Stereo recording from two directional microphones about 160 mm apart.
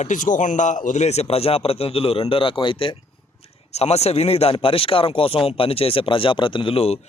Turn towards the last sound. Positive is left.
turn(degrees=40)  # may be behind; listen again after turning